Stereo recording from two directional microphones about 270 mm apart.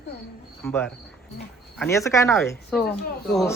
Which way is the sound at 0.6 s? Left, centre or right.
Centre.